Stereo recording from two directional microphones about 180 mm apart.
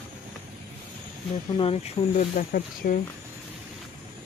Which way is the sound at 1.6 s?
35° left (ahead or behind).